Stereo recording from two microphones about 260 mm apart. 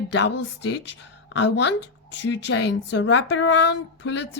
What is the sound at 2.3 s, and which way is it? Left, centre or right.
A woman's voice, left.